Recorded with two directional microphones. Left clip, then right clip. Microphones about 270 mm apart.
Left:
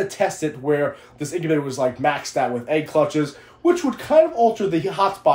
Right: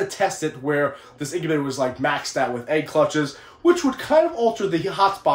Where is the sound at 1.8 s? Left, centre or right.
Centre.